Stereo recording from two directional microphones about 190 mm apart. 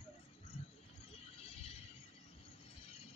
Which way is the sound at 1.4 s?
30° left (ahead or behind).